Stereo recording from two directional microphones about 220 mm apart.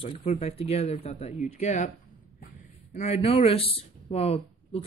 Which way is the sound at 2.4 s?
30° left (ahead or behind).